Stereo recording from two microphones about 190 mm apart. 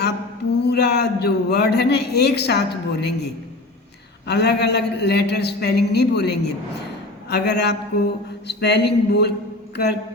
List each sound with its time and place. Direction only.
0.6 s a man's voice: 60° left (ahead or behind)
4.3 s a man's voice: 60° left (ahead or behind)